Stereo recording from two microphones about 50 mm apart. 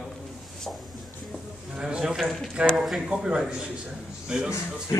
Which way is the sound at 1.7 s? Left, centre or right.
Centre.